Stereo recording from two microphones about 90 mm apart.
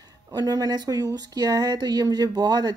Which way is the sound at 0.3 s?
45° right (ahead or behind).